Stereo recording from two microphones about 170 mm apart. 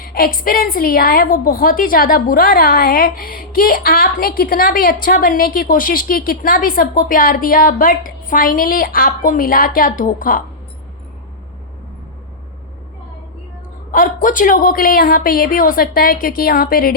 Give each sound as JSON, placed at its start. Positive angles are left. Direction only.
{"t": 0.0, "sound": "a woman's voice", "side_deg": 60}
{"t": 13.9, "sound": "a woman's voice", "side_deg": 50}